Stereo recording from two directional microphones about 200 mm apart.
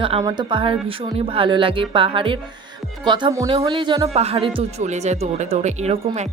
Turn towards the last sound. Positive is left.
turn(degrees=-35)  # may be behind; listen again after turning